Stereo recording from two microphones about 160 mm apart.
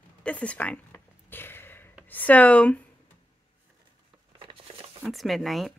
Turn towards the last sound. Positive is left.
turn(degrees=0)  # may be behind; listen again after turning